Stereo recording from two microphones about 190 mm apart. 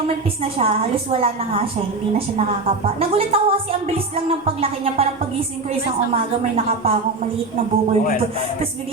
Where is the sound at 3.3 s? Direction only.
30° right (ahead or behind).